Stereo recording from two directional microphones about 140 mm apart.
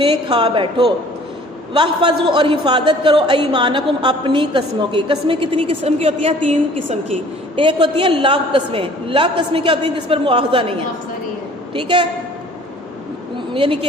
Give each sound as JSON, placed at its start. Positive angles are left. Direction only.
{"t": 0.0, "sound": "a man's voice", "side_deg": -35}
{"t": 1.7, "sound": "a man's voice", "side_deg": -35}
{"t": 7.1, "sound": "a man's voice", "side_deg": -35}
{"t": 13.5, "sound": "a woman's voice", "side_deg": -40}